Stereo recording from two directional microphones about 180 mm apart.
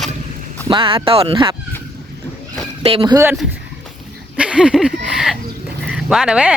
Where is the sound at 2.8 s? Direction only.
30° right (ahead or behind).